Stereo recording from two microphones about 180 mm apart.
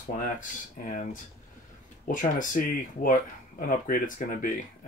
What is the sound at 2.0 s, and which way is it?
Speech, 50° left (ahead or behind).